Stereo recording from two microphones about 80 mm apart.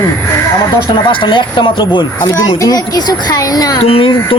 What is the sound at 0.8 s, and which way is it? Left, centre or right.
Speech, left.